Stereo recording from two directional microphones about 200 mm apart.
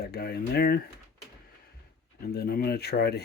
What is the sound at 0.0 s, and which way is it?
Speech, 50° left (ahead or behind).